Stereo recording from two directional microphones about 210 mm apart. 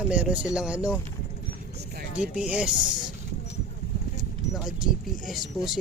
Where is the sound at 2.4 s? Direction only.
5° right (ahead or behind).